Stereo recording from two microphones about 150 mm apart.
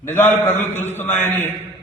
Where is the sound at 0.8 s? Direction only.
15° left (ahead or behind).